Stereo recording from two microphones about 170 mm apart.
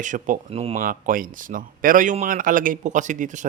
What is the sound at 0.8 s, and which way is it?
Speech, 55° right (ahead or behind).